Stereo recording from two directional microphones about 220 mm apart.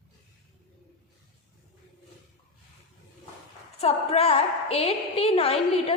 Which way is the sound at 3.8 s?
25° left (ahead or behind).